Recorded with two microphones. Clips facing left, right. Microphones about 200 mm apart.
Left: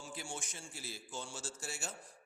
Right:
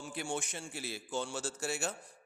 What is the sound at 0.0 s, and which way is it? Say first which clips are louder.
A man's voice: right 7 dB; 60° right (ahead or behind).